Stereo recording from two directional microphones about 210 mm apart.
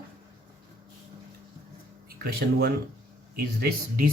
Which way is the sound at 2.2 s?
50° right (ahead or behind).